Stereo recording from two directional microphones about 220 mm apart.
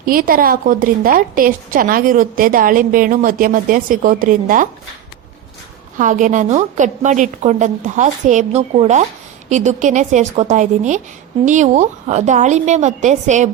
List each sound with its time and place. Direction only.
0.0 s a woman's voice: 40° right (ahead or behind)
6.0 s a woman's voice: 35° right (ahead or behind)